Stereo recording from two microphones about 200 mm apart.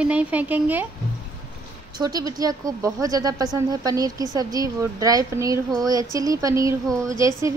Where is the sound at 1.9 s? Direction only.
20° right (ahead or behind).